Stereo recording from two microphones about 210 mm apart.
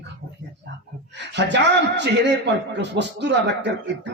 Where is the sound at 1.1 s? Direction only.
55° right (ahead or behind).